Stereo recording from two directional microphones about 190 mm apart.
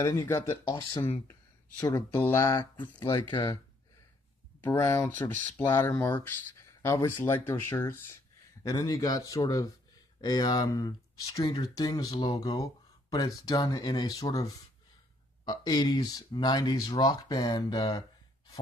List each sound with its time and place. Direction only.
0.0 s speech: 15° left (ahead or behind)
2.2 s speech: 20° left (ahead or behind)
4.6 s speech: 15° left (ahead or behind)